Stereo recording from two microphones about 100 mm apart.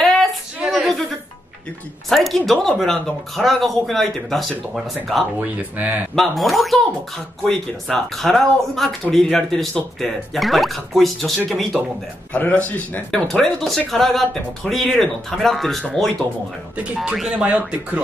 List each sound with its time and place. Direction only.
0.0 s a sound: centre (ahead or behind)
2.0 s speech: centre (ahead or behind)
5.4 s speech: 15° right (ahead or behind)
6.1 s speech: centre (ahead or behind)
12.3 s a man's voice: 15° left (ahead or behind)
13.1 s speech: 5° left (ahead or behind)
16.7 s speech: 10° right (ahead or behind)